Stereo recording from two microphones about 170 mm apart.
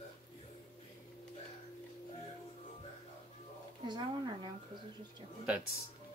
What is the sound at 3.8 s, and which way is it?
Speech, 25° right (ahead or behind).